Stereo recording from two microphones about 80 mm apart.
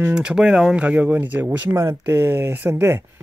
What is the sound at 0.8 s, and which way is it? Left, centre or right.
Speech, centre.